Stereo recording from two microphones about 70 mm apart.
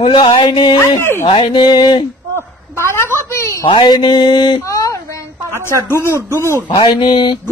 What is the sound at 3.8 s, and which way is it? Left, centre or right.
Speech, left.